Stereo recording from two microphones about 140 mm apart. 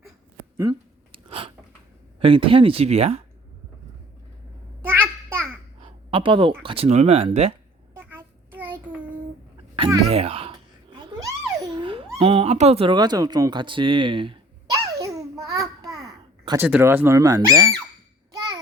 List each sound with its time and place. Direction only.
0.5 s speech: 25° right (ahead or behind)
1.1 s chewing: 40° right (ahead or behind)
2.1 s speech: 40° right (ahead or behind)
4.9 s a sound: 15° right (ahead or behind)
5.8 s speech: 40° right (ahead or behind)
7.9 s a sound: 15° right (ahead or behind)
10.1 s a sound: 45° right (ahead or behind)
11.2 s babbling: 25° right (ahead or behind)
11.8 s a sound: 40° right (ahead or behind)
12.9 s speech: 30° right (ahead or behind)
15.0 s babbling: 25° right (ahead or behind)
16.6 s speech: 10° right (ahead or behind)